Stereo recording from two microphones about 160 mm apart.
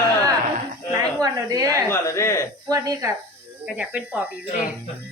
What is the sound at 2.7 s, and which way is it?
Speech, 20° right (ahead or behind).